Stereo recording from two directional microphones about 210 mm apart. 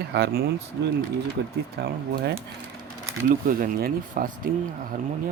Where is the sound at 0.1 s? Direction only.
50° right (ahead or behind).